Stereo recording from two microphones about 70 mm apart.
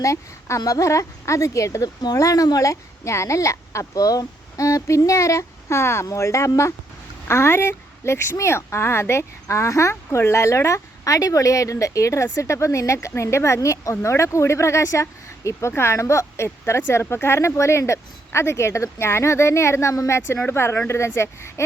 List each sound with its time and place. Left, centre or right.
0.0 s speech: left